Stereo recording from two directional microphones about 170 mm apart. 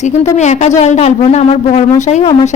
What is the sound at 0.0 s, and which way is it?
A woman's voice, 45° left (ahead or behind).